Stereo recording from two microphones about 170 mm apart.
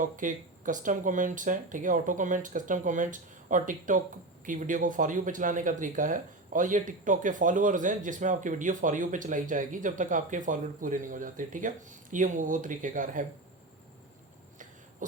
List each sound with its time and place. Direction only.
0.0 s speech: 50° right (ahead or behind)